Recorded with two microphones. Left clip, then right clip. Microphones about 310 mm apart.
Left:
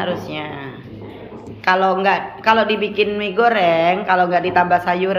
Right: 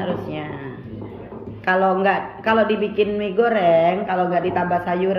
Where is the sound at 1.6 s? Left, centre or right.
Centre.